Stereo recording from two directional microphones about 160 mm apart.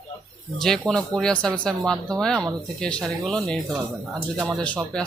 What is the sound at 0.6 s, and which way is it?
Speech, 5° left (ahead or behind).